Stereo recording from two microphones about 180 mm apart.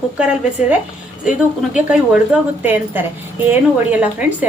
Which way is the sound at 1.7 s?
5° right (ahead or behind).